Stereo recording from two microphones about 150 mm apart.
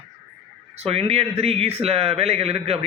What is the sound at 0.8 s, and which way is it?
A man's voice, 40° right (ahead or behind).